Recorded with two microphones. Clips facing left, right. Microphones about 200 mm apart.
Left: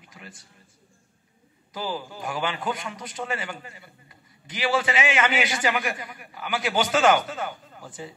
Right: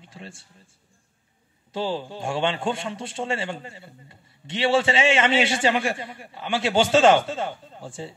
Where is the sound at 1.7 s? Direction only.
30° right (ahead or behind).